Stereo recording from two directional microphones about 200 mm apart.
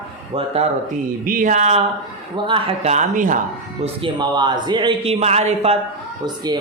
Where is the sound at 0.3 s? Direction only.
30° right (ahead or behind).